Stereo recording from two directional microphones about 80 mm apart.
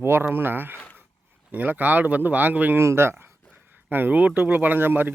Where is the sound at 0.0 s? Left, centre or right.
Right.